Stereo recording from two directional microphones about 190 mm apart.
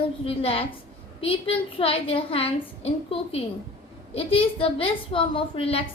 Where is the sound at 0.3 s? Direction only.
30° left (ahead or behind).